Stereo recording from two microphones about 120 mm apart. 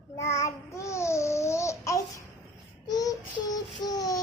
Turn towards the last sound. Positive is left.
turn(degrees=30)  # may be behind; listen again after turning